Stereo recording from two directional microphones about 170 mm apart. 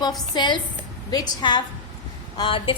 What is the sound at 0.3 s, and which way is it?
A woman's voice, 25° left (ahead or behind).